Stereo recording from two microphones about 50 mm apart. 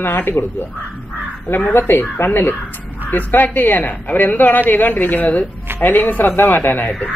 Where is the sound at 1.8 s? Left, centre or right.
Left.